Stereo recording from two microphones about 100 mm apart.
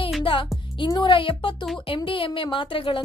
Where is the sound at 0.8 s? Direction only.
50° left (ahead or behind).